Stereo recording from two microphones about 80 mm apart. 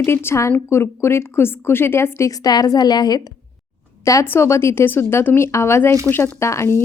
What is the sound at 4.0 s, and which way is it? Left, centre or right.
A woman's voice, left.